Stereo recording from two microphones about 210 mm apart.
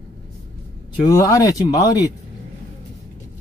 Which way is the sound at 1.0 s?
15° left (ahead or behind).